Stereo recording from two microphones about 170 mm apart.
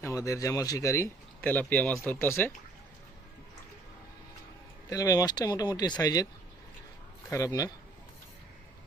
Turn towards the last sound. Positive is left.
turn(degrees=20)  # may be behind; listen again after turning